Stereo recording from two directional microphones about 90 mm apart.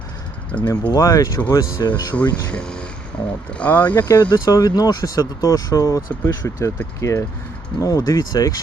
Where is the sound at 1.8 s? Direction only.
50° left (ahead or behind).